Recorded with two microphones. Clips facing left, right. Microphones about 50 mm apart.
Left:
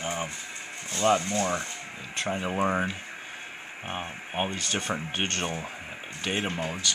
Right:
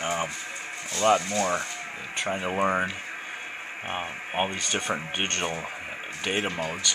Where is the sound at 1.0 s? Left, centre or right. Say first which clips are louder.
Right 2 dB; centre.